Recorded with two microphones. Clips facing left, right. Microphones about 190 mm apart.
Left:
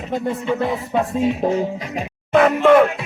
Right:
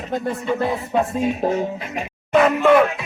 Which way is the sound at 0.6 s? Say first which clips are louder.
Even; centre (ahead or behind).